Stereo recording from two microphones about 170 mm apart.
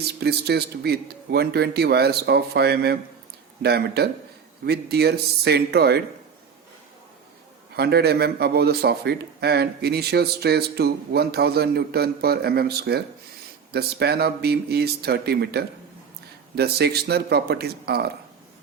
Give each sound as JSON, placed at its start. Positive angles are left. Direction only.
{"t": 0.2, "sound": "speech", "side_deg": -70}
{"t": 7.8, "sound": "speech", "side_deg": -70}